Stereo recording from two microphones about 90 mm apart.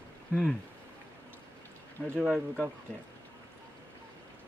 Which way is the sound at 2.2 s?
15° right (ahead or behind).